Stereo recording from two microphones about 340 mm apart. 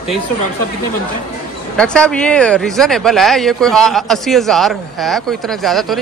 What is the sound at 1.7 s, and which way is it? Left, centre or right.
Speech, centre.